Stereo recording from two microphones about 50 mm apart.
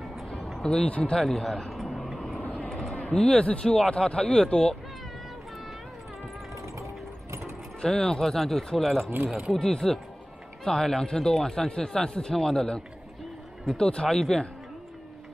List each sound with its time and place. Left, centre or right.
0.6 s speech: centre
0.8 s speech: left
1.2 s speech: centre
2.9 s a sound: left
3.6 s speech: centre
3.9 s speech: centre
6.5 s vehicle: right
7.8 s speech: centre
9.1 s speech: right
9.5 s speech: centre
13.8 s speech: centre